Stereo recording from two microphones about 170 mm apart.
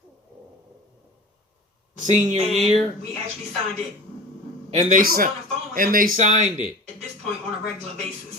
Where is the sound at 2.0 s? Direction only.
45° right (ahead or behind).